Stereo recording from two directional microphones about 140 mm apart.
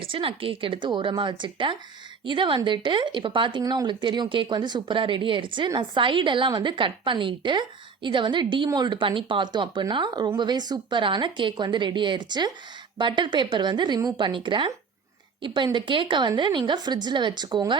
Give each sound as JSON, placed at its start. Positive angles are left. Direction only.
{"t": 0.0, "sound": "speech", "side_deg": -40}